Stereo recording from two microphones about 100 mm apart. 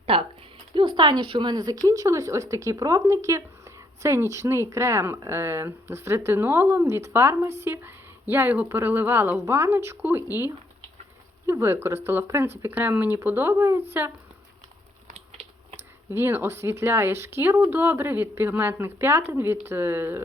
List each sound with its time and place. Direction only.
0.0 s speech: 75° right (ahead or behind)
0.7 s speech: 60° right (ahead or behind); by 10.2 s 20° right (ahead or behind)
11.4 s speech: 25° right (ahead or behind)
16.1 s speech: 25° right (ahead or behind)